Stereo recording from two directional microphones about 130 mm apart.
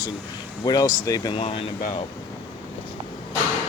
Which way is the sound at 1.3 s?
45° left (ahead or behind).